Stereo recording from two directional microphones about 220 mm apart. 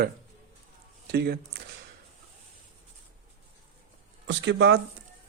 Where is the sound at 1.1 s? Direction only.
45° right (ahead or behind).